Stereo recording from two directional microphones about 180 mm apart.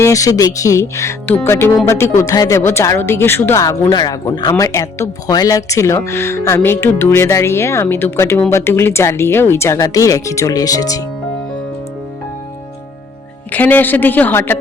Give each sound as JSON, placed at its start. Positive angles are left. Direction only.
{"t": 0.0, "sound": "speech", "side_deg": 20}
{"t": 13.5, "sound": "speech", "side_deg": 10}